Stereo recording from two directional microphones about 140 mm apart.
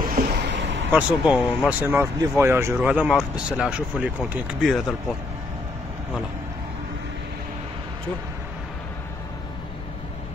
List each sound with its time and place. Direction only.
0.0 s vehicle: 90° right
0.8 s speech: 10° right (ahead or behind)